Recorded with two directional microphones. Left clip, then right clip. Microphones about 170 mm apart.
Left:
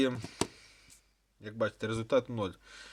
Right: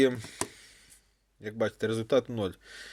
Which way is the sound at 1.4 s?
20° right (ahead or behind).